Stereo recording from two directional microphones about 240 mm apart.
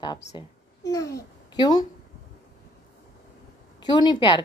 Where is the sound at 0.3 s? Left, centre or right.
Centre.